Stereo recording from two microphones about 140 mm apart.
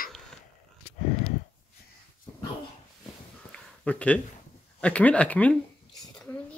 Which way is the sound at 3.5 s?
10° left (ahead or behind).